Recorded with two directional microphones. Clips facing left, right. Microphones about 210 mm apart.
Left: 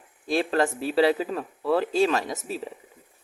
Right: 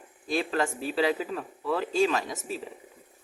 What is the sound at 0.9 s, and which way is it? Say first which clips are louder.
Speech: left 6 dB; 40° left (ahead or behind).